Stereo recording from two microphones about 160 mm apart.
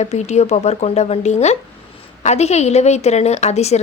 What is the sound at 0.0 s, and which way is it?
A woman's voice, 45° left (ahead or behind).